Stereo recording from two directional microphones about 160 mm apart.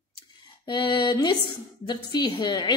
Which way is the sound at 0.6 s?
25° left (ahead or behind).